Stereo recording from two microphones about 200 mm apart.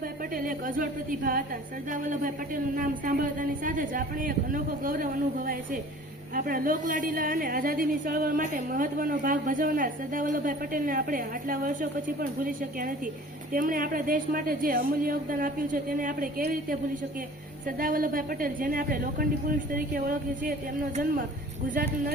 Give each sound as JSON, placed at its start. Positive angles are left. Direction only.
{"t": 0.3, "sound": "a woman's voice", "side_deg": -45}
{"t": 6.3, "sound": "a woman's voice", "side_deg": -45}